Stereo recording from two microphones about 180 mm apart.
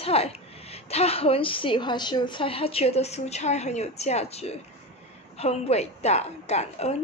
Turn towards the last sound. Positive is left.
turn(degrees=35)  # may be behind; listen again after turning